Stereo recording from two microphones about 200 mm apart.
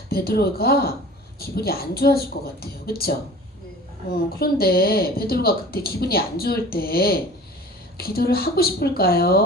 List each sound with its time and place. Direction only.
0.1 s speech: 50° left (ahead or behind)